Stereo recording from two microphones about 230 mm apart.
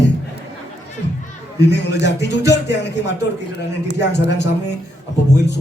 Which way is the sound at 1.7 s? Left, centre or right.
Left.